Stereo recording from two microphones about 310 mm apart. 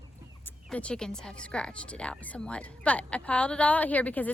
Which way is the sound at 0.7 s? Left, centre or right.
Centre.